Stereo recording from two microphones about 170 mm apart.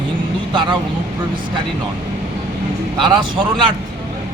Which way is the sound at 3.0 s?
30° right (ahead or behind).